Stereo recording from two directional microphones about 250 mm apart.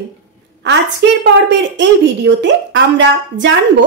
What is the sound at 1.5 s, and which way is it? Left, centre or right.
A woman's voice, right.